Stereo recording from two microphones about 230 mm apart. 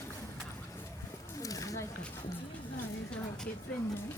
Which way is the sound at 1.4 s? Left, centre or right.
Centre.